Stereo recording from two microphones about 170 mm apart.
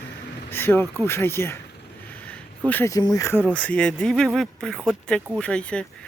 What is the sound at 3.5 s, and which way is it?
Speech, 10° left (ahead or behind).